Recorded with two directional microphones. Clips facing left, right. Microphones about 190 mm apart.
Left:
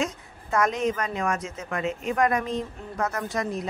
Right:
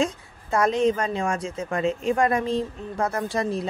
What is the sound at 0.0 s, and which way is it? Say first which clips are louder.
A woman's voice: right 4 dB; 30° right (ahead or behind).